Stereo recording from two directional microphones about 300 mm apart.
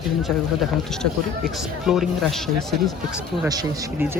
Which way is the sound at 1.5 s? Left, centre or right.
Centre.